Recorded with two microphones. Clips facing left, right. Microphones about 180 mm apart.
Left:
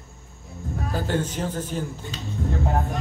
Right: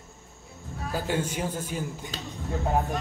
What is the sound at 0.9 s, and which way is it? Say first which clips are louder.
Speech: left 2 dB; 10° right (ahead or behind).